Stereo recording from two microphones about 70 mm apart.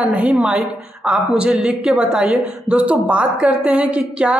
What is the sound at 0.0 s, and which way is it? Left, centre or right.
A man's voice, centre.